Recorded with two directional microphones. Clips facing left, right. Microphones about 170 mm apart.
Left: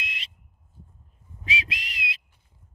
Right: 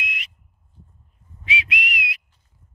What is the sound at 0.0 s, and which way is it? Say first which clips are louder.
Smoke detector: right 5 dB; 30° left (ahead or behind).